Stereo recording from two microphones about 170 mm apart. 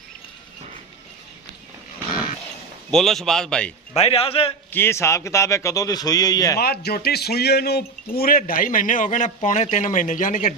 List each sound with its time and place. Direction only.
2.9 s speech: centre (ahead or behind)
3.9 s a man's voice: 35° left (ahead or behind)
4.7 s a man's voice: 15° left (ahead or behind)
6.6 s speech: 70° left (ahead or behind); by 10.5 s 50° left (ahead or behind)